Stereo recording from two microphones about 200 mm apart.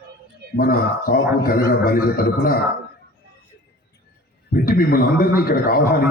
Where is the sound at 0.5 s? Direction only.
45° left (ahead or behind).